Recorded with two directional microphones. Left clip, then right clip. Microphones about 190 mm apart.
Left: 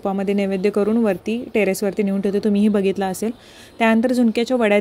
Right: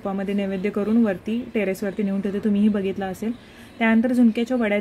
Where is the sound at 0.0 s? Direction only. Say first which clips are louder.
Left 5 dB; 35° left (ahead or behind).